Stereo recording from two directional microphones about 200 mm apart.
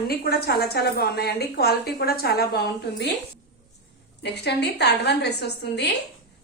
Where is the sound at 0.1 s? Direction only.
50° left (ahead or behind).